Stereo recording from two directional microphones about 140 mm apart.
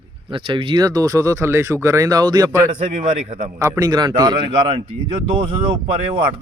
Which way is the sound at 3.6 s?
25° right (ahead or behind).